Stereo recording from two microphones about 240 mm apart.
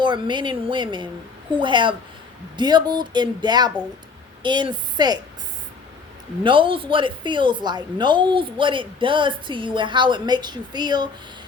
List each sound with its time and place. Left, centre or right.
0.0 s a woman's voice: centre
6.4 s a woman's voice: right